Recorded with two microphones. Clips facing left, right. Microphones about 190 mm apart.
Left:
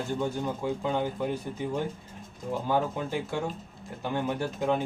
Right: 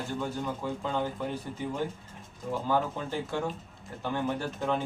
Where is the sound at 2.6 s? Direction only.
15° left (ahead or behind).